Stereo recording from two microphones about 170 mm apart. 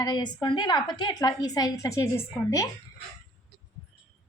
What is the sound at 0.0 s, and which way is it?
A woman's voice, 25° left (ahead or behind).